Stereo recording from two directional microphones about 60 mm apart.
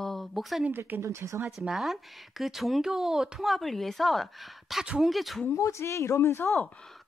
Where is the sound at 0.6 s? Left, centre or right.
Right.